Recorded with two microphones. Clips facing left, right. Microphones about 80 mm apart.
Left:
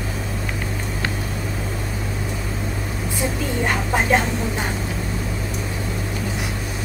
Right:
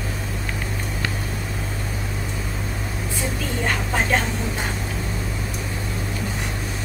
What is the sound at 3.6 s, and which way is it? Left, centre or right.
Vehicle, centre.